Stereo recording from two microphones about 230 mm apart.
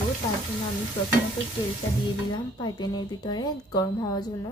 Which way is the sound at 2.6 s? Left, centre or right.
Centre.